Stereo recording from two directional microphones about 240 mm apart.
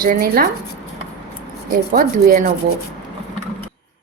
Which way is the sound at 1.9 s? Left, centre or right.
Right.